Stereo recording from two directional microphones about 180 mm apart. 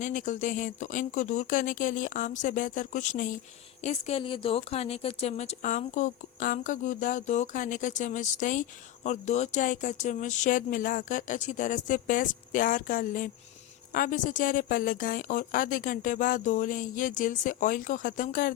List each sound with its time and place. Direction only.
0.0 s speech: 45° left (ahead or behind)